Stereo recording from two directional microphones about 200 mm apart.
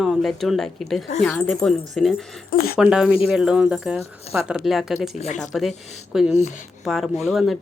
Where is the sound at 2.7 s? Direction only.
5° right (ahead or behind).